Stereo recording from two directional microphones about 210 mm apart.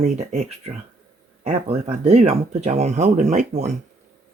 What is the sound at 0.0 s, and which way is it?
Speech, 35° right (ahead or behind).